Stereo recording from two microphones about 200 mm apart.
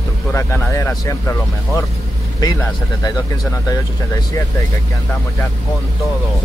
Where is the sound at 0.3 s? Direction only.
15° left (ahead or behind).